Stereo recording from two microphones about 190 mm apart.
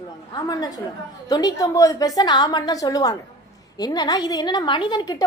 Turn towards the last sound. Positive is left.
turn(degrees=20)  # may be behind; listen again after turning